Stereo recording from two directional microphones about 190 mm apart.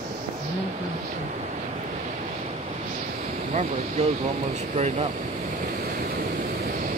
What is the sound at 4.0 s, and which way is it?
Speech, 35° right (ahead or behind).